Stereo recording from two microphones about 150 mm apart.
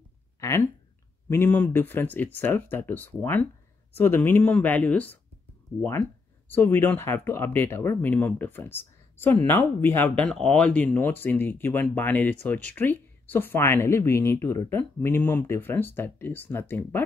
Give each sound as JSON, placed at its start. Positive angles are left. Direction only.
{"t": 0.4, "sound": "a sound", "side_deg": 20}
{"t": 1.3, "sound": "speech", "side_deg": 10}
{"t": 6.5, "sound": "speech", "side_deg": 15}